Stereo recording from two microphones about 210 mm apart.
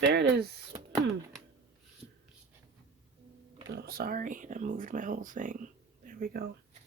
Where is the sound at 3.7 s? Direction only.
45° right (ahead or behind).